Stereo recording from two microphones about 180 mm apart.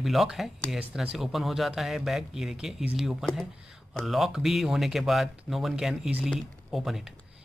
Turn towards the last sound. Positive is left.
turn(degrees=0)  # may be behind; listen again after turning